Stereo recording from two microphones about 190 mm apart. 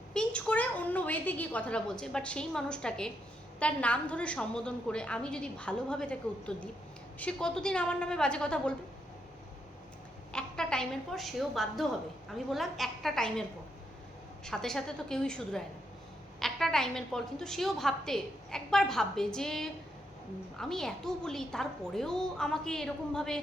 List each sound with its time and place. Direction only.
0.1 s a woman's voice: 5° left (ahead or behind)
10.3 s a woman's voice: 5° left (ahead or behind)
14.4 s a woman's voice: centre (ahead or behind)